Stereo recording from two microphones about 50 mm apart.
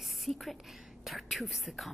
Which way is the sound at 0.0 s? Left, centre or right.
Centre.